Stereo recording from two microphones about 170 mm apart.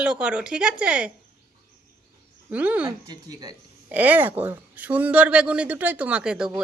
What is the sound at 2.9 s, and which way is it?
Speech, 25° right (ahead or behind).